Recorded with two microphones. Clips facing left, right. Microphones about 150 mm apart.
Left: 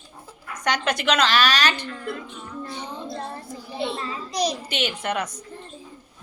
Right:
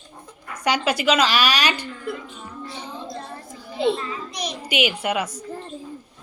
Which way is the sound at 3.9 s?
35° left (ahead or behind).